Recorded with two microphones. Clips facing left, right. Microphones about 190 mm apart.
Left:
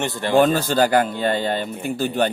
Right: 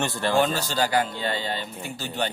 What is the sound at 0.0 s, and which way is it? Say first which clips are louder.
Speech: left 4 dB; 20° left (ahead or behind).